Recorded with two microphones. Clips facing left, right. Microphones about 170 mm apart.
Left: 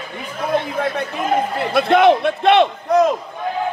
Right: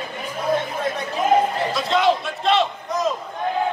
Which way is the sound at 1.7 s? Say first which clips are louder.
Left 8 dB; 60° left (ahead or behind).